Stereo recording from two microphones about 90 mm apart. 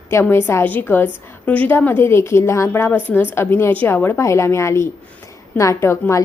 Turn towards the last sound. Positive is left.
turn(degrees=30)  # may be behind; listen again after turning